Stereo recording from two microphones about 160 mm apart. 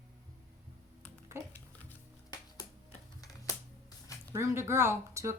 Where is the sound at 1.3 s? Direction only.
15° right (ahead or behind).